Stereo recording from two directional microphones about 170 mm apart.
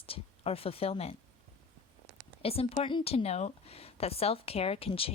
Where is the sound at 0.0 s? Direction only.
35° left (ahead or behind).